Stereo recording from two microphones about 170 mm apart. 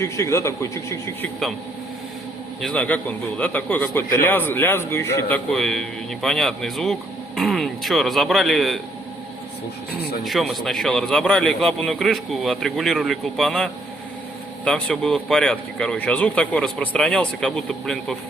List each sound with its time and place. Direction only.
0.0 s a man's voice: 15° left (ahead or behind)
2.6 s a man's voice: 5° left (ahead or behind)
10.2 s a man's voice: centre (ahead or behind)